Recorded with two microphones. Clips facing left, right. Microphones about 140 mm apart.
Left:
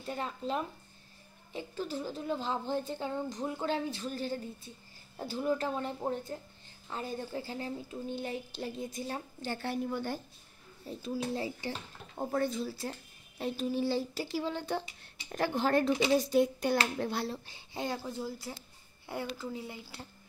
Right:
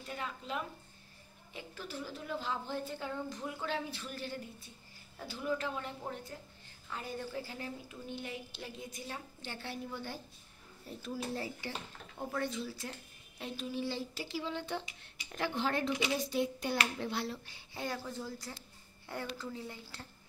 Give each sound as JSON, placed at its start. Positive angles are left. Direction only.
{"t": 0.0, "sound": "speech", "side_deg": 35}
{"t": 11.0, "sound": "speech", "side_deg": 20}
{"t": 12.2, "sound": "speech", "side_deg": 40}
{"t": 18.2, "sound": "speech", "side_deg": 10}